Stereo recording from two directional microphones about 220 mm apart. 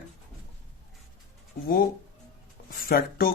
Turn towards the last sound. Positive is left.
turn(degrees=40)  # may be behind; listen again after turning